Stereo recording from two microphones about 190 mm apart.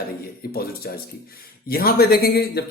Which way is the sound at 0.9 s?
55° left (ahead or behind).